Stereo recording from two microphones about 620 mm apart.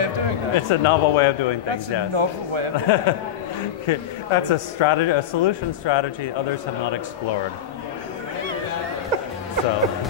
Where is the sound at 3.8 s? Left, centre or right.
Left.